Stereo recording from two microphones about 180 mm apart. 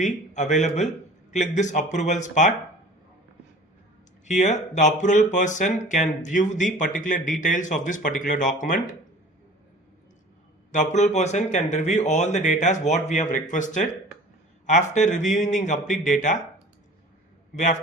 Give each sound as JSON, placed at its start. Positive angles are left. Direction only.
{"t": 0.0, "sound": "speech", "side_deg": 40}
{"t": 4.3, "sound": "speech", "side_deg": 40}
{"t": 10.7, "sound": "speech", "side_deg": 40}